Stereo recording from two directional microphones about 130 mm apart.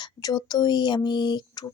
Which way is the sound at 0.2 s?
30° left (ahead or behind).